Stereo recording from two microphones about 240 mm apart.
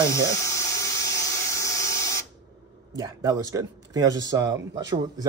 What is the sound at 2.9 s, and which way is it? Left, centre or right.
Speech, centre.